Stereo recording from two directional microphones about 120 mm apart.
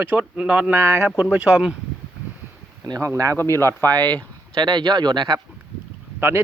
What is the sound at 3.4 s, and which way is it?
Speech, 20° left (ahead or behind).